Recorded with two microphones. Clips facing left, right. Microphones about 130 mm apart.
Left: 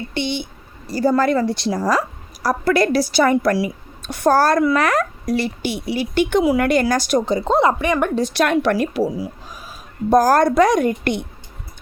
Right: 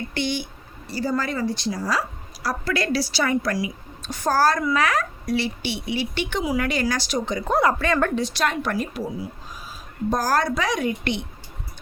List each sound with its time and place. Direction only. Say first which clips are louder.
0.1 s speech: left 3 dB; 25° left (ahead or behind)
0.9 s speech: left 8 dB; 45° left (ahead or behind)
1.1 s a woman's voice: left 6 dB; 65° left (ahead or behind)
1.9 s a woman's voice: left 6 dB; 45° left (ahead or behind)
7.3 s speech: left 2 dB; 30° left (ahead or behind)
8.3 s speech: left 7 dB; 65° left (ahead or behind); by 9.3 s 90° left
10.1 s a woman's voice: left 8 dB; 55° left (ahead or behind)